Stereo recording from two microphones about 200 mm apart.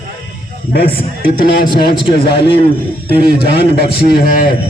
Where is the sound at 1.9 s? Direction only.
25° left (ahead or behind).